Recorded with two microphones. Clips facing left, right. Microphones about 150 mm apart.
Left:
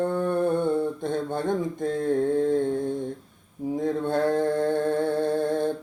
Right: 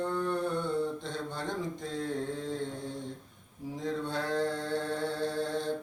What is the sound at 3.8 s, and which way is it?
Mantra, 55° left (ahead or behind).